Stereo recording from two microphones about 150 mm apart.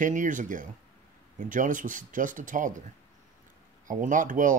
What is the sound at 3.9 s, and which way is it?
Speech, 60° right (ahead or behind).